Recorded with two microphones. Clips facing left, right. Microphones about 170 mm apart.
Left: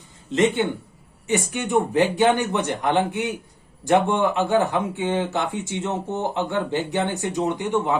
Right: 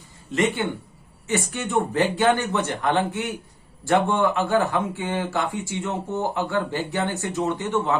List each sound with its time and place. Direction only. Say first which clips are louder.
0.3 s speech: left 3 dB; 20° left (ahead or behind)